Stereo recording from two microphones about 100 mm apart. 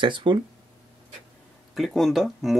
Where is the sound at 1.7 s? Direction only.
Centre (ahead or behind).